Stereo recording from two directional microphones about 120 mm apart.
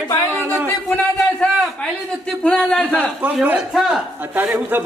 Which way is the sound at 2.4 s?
5° left (ahead or behind).